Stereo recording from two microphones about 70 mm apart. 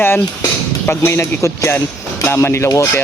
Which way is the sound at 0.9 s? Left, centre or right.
Left.